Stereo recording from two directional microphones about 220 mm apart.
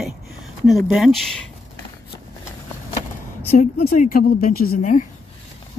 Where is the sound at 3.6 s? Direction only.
40° left (ahead or behind).